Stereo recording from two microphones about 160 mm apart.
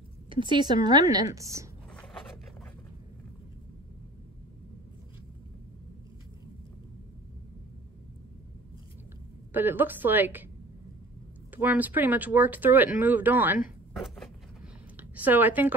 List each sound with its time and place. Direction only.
0.3 s a woman's voice: 30° right (ahead or behind)
9.5 s speech: 10° right (ahead or behind)
11.5 s speech: 10° right (ahead or behind)
13.9 s vehicle: centre (ahead or behind)
15.0 s speech: 10° right (ahead or behind)